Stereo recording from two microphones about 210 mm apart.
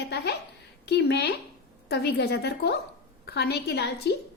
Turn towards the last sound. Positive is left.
turn(degrees=50)  # may be behind; listen again after turning